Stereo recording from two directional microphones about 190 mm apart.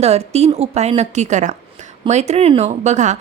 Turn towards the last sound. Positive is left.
turn(degrees=-40)  # may be behind; listen again after turning